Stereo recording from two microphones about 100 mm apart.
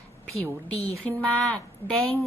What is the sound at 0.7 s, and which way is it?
Speech, 90° left.